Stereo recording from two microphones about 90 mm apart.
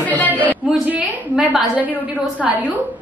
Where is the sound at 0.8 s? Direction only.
15° right (ahead or behind).